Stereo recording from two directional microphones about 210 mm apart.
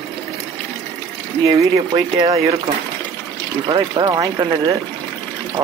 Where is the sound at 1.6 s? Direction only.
20° right (ahead or behind).